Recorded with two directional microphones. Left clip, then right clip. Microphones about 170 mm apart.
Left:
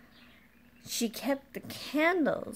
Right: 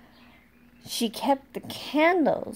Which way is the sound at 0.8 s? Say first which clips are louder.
Right 7 dB; 15° left (ahead or behind).